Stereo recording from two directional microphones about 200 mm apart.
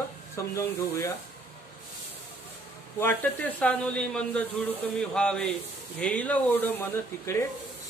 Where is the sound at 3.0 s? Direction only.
10° left (ahead or behind).